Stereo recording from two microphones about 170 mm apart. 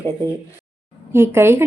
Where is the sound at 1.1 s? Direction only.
15° right (ahead or behind).